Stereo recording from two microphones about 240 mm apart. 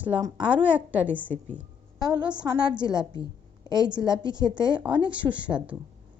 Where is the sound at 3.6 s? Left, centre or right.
Centre.